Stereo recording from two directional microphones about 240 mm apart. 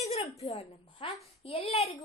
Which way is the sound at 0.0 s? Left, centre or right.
Left.